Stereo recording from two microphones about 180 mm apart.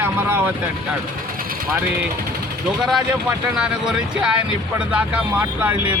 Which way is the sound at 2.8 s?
Centre (ahead or behind).